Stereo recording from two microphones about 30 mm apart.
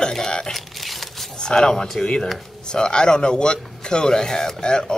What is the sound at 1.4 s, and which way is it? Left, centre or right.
Speech, left.